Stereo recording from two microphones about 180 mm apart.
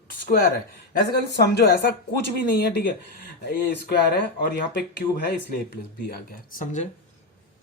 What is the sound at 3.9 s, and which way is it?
Speech, 60° left (ahead or behind).